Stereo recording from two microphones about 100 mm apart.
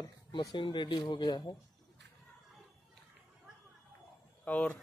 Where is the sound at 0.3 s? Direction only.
45° left (ahead or behind).